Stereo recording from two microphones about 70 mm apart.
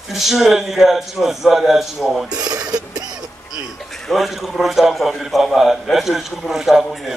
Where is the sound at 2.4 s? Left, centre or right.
Right.